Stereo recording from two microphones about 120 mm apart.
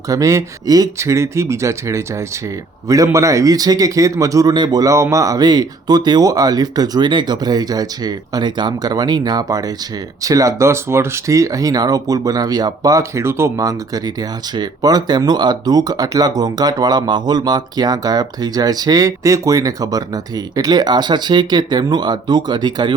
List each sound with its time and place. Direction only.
0.1 s speech: 25° right (ahead or behind)